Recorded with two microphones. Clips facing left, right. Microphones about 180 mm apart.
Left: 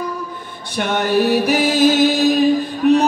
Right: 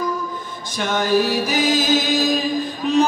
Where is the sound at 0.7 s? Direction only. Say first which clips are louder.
Left 2 dB; 65° left (ahead or behind).